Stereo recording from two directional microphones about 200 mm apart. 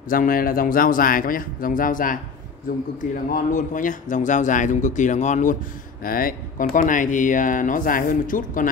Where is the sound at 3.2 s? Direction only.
40° left (ahead or behind).